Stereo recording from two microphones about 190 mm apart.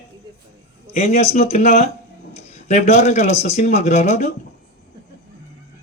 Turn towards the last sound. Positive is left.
turn(degrees=35)  # may be behind; listen again after turning